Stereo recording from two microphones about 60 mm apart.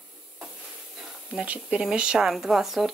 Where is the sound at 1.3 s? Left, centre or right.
Centre.